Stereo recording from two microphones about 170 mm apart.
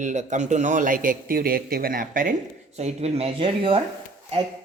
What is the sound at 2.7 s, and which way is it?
Speech, 40° right (ahead or behind).